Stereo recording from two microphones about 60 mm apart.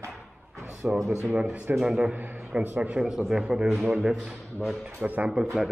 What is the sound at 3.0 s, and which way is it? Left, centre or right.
A man's voice, centre.